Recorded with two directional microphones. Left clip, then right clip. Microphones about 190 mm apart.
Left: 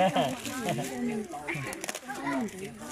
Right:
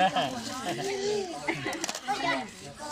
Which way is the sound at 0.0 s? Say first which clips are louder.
Even; 15° left (ahead or behind).